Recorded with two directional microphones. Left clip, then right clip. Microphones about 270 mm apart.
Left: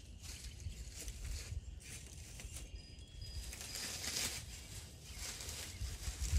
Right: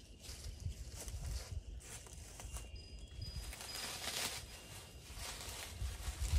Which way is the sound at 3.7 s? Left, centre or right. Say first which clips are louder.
Even; centre.